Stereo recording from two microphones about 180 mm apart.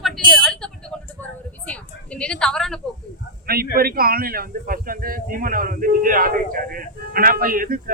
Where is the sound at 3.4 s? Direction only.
60° right (ahead or behind).